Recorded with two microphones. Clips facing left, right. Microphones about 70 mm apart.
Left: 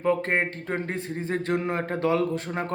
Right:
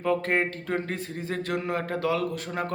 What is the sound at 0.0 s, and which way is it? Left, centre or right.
A man's voice, left.